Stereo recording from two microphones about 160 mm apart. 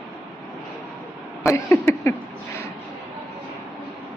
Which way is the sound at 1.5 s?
15° left (ahead or behind).